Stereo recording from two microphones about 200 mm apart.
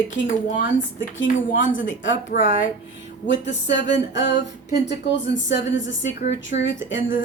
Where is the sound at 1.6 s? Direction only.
70° left (ahead or behind).